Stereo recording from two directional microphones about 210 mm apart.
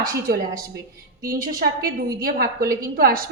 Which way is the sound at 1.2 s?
45° right (ahead or behind).